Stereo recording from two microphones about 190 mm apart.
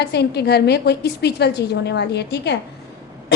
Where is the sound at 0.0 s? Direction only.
60° left (ahead or behind).